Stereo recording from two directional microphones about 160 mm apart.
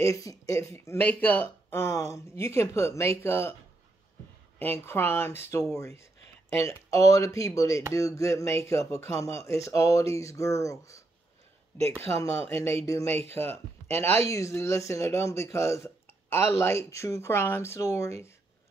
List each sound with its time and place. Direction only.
0.0 s speech: 20° left (ahead or behind)
4.6 s speech: 15° left (ahead or behind)
12.2 s speech: 15° left (ahead or behind)